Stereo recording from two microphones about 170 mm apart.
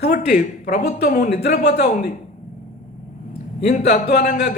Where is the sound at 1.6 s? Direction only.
75° left (ahead or behind).